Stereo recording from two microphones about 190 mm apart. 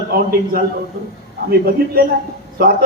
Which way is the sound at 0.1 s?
50° right (ahead or behind).